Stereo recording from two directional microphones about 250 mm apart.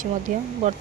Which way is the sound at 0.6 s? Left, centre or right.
Right.